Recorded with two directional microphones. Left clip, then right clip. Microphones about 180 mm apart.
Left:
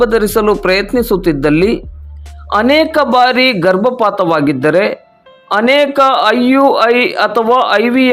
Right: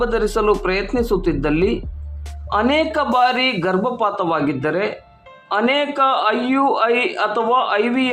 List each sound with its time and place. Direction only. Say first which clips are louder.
0.0 s a man's voice: left 7 dB; 25° left (ahead or behind)